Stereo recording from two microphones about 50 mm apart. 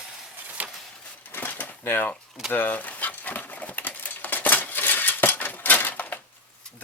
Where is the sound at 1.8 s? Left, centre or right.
Left.